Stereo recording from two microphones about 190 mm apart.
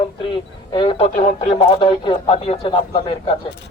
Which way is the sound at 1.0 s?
35° left (ahead or behind).